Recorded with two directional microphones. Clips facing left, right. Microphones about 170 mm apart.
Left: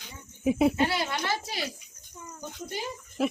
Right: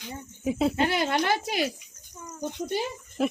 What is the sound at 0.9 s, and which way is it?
Speech, 60° right (ahead or behind).